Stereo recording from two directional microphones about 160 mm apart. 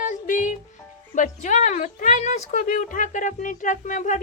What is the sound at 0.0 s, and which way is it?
Music, 55° left (ahead or behind).